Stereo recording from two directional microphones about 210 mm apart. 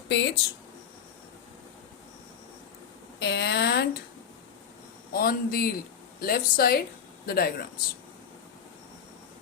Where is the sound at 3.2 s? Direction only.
55° left (ahead or behind).